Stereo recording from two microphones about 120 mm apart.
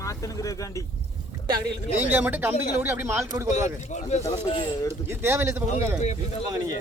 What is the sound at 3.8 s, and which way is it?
Speech, 70° left (ahead or behind).